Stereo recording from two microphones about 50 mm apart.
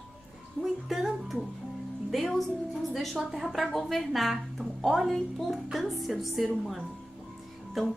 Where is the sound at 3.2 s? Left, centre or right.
Centre.